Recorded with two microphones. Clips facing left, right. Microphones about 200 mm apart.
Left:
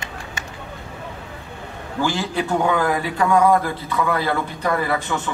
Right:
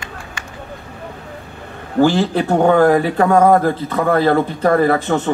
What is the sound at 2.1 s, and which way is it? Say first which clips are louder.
A man's voice: right 6 dB; 60° right (ahead or behind).